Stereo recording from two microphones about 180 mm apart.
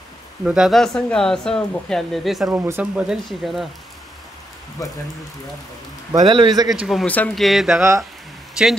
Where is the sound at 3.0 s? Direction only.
Centre (ahead or behind).